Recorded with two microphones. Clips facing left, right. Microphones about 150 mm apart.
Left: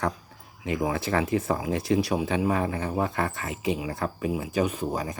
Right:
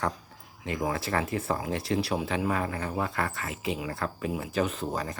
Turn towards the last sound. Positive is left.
turn(degrees=10)  # may be behind; listen again after turning